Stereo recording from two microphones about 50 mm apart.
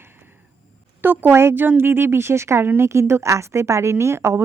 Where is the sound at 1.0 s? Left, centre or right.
Right.